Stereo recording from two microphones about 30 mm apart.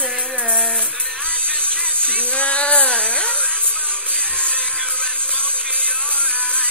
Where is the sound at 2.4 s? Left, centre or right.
Left.